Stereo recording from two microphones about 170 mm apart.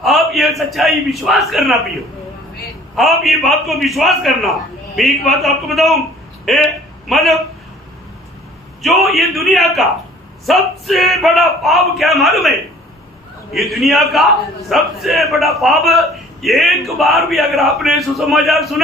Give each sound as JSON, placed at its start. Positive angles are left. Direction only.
{"t": 0.0, "sound": "a sound", "side_deg": 0}
{"t": 0.7, "sound": "a man's voice", "side_deg": 0}
{"t": 2.9, "sound": "a man's voice", "side_deg": 0}
{"t": 8.8, "sound": "a man's voice", "side_deg": 0}